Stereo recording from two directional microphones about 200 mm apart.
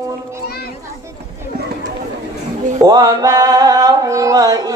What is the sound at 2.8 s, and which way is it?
Mantra, 20° right (ahead or behind).